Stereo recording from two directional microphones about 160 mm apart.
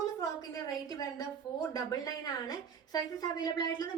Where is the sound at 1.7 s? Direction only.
25° left (ahead or behind).